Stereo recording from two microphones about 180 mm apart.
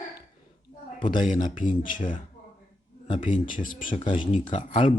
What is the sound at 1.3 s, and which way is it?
Speech, 45° left (ahead or behind).